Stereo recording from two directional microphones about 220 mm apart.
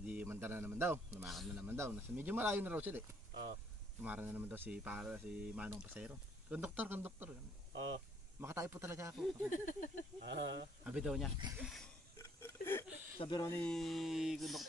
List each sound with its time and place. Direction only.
0.0 s speech: 10° right (ahead or behind)
4.0 s speech: 5° right (ahead or behind)
7.7 s speech: 55° right (ahead or behind)
8.4 s speech: 10° right (ahead or behind)
9.1 s speech: centre (ahead or behind)
9.5 s a sound: 35° left (ahead or behind)
10.2 s speech: 55° right (ahead or behind)
10.8 s speech: 5° right (ahead or behind)
12.2 s a sound: 10° left (ahead or behind)
13.2 s speech: 15° left (ahead or behind); by 14.7 s centre (ahead or behind)